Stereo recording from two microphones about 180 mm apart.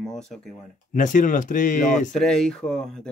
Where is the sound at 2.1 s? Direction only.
5° left (ahead or behind).